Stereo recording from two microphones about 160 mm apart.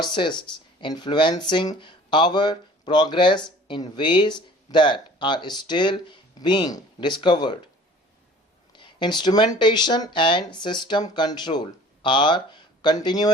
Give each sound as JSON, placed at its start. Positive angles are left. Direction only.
{"t": 0.0, "sound": "speech", "side_deg": 30}
{"t": 8.7, "sound": "speech", "side_deg": 30}